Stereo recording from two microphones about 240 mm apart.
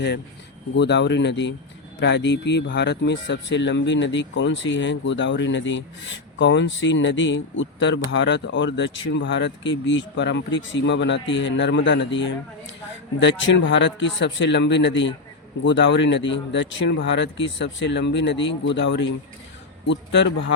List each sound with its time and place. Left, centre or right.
0.8 s speech: left